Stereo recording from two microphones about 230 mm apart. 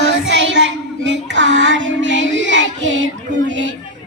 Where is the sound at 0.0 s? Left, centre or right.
Right.